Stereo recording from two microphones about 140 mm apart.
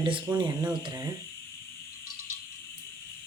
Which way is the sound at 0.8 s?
30° right (ahead or behind).